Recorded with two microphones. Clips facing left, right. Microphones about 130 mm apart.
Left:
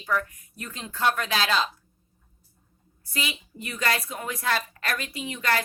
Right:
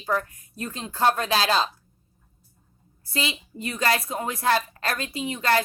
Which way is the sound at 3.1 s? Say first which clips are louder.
Right 3 dB; 30° right (ahead or behind).